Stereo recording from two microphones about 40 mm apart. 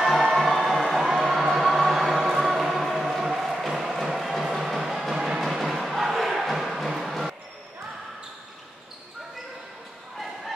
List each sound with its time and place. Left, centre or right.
0.0 s music: centre
1.1 s a sound: centre
4.5 s music: centre
5.1 s music: right
5.4 s music: centre